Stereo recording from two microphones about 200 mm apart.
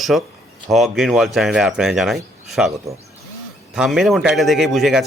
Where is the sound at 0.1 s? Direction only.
Centre (ahead or behind).